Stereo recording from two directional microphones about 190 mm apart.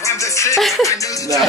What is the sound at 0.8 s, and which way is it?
Speech, 15° left (ahead or behind).